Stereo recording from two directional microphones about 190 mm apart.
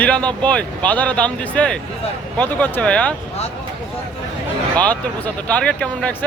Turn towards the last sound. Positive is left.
turn(degrees=5)  # may be behind; listen again after turning